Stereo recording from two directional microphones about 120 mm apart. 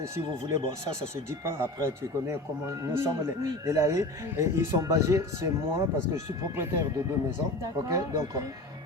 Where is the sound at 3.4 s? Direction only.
25° right (ahead or behind).